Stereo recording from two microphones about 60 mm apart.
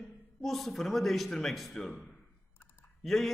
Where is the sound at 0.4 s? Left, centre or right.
Centre.